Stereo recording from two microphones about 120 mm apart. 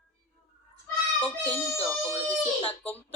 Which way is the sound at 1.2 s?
15° left (ahead or behind).